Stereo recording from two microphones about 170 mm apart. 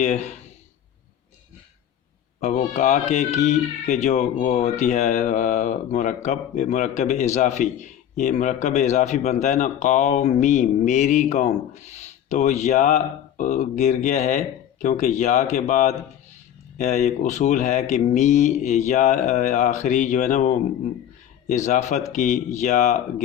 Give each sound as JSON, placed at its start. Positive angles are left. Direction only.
{"t": 0.0, "sound": "speech", "side_deg": 45}
{"t": 2.4, "sound": "speech", "side_deg": 45}
{"t": 21.5, "sound": "speech", "side_deg": 45}